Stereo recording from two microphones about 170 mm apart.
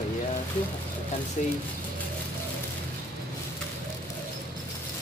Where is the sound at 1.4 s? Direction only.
45° left (ahead or behind).